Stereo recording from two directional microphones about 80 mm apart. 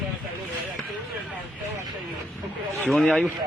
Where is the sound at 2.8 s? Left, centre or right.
Centre.